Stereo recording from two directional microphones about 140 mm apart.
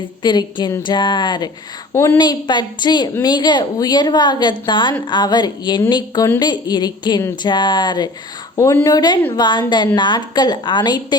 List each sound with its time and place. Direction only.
0.2 s a woman's voice: 30° left (ahead or behind)
1.9 s a woman's voice: 20° left (ahead or behind)
2.1 s a woman's voice: 30° left (ahead or behind)